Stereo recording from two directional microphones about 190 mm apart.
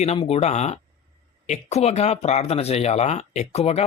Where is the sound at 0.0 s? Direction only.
35° left (ahead or behind).